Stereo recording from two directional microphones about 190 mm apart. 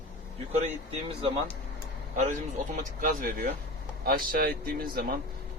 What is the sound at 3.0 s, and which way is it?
Speech, 45° right (ahead or behind).